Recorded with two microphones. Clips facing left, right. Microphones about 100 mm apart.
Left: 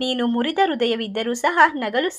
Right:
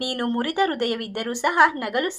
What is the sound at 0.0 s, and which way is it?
A woman's voice, 20° right (ahead or behind).